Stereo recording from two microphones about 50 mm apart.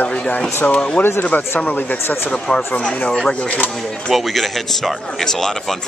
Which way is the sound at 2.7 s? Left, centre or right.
Left.